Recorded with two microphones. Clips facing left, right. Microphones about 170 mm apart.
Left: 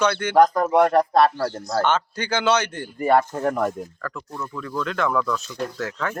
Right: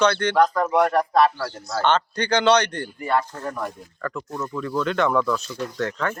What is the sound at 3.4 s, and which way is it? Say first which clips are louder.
Speech: left 7 dB; 65° left (ahead or behind).